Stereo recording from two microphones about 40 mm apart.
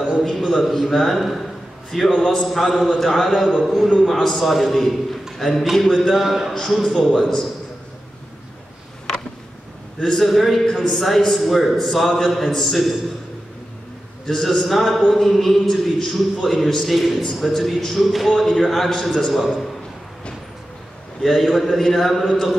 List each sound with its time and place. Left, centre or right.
0.2 s a man's voice: centre
6.1 s a man's voice: centre
6.5 s a man's voice: centre
10.0 s a man's voice: centre
14.2 s a man's voice: centre
21.2 s a man's voice: centre